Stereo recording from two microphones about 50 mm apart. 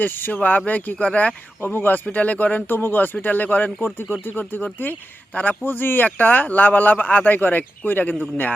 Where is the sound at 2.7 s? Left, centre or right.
Left.